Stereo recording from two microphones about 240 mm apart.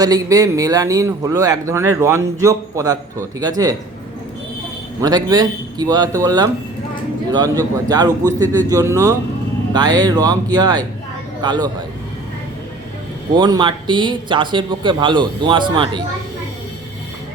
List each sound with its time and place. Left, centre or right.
0.0 s a man's voice: centre
4.9 s a man's voice: centre
13.3 s a man's voice: centre